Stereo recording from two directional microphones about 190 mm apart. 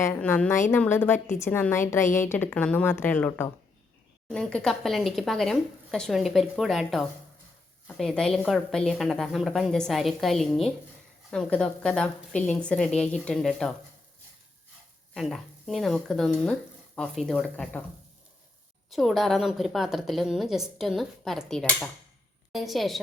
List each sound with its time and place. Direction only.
0.0 s a woman's voice: 10° left (ahead or behind)
15.1 s a woman's voice: centre (ahead or behind)
18.9 s a woman's voice: centre (ahead or behind)